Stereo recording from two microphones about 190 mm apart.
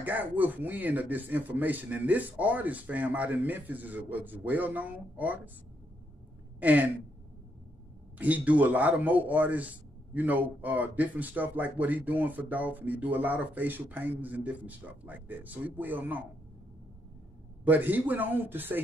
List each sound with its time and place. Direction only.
0.0 s a man's voice: 10° right (ahead or behind)
6.6 s a man's voice: 10° right (ahead or behind)
8.2 s a man's voice: 10° right (ahead or behind)
17.6 s a man's voice: 10° right (ahead or behind)